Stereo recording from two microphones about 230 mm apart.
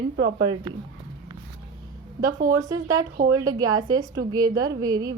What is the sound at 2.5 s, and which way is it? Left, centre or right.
A woman's voice, centre.